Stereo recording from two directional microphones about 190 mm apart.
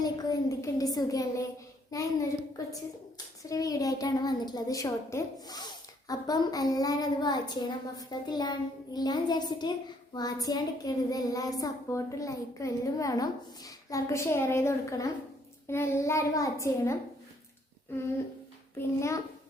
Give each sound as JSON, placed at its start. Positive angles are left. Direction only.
{"t": 0.0, "sound": "a child's voice", "side_deg": 20}
{"t": 3.5, "sound": "a child's voice", "side_deg": 20}
{"t": 18.8, "sound": "a child's voice", "side_deg": 15}